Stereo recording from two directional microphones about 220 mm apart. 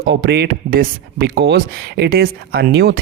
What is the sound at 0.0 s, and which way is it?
Speech, 50° right (ahead or behind).